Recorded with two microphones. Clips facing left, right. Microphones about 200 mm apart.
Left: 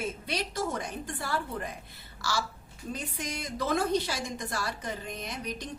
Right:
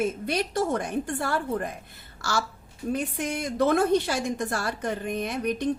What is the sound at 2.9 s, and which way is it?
A woman's voice, 60° right (ahead or behind).